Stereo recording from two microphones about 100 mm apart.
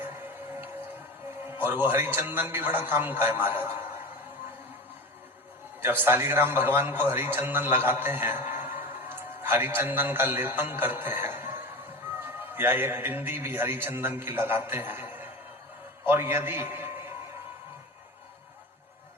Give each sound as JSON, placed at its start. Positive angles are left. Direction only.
{"t": 0.0, "sound": "a sound", "side_deg": -20}
{"t": 1.5, "sound": "a man's voice", "side_deg": -20}
{"t": 5.8, "sound": "a man's voice", "side_deg": -20}